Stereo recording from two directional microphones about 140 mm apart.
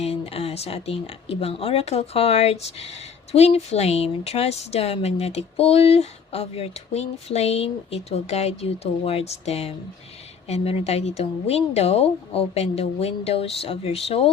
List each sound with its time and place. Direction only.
0.0 s speech: 45° left (ahead or behind)